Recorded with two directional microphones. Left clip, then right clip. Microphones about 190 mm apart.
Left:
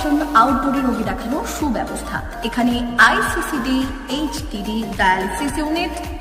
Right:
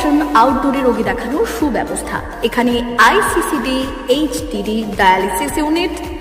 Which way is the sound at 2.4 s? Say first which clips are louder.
Right 6 dB; 15° right (ahead or behind).